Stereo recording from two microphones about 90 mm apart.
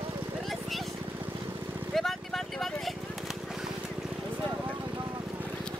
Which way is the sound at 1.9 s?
5° left (ahead or behind).